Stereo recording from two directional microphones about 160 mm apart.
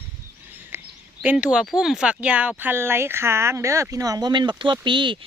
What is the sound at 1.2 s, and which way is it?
Speech, 10° right (ahead or behind).